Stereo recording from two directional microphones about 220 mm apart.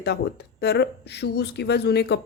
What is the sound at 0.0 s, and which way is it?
Speech, 50° left (ahead or behind).